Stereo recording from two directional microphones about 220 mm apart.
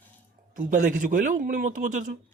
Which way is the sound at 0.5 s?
35° right (ahead or behind).